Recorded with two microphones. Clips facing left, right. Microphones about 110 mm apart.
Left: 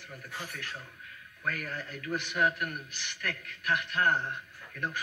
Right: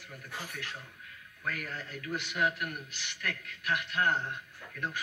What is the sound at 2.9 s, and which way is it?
Speech, 15° right (ahead or behind).